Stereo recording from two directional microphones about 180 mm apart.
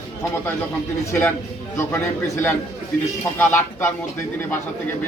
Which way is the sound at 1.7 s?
15° left (ahead or behind).